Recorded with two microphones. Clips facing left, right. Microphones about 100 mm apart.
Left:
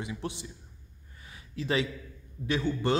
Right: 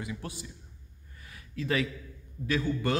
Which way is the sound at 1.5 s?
25° left (ahead or behind).